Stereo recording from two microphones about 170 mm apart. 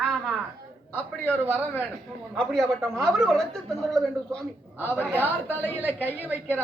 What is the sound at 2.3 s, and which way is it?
A woman's voice, centre (ahead or behind).